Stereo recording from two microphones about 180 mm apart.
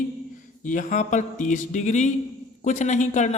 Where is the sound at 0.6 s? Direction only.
45° left (ahead or behind).